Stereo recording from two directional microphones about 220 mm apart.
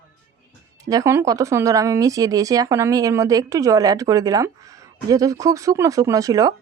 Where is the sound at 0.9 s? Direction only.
15° right (ahead or behind).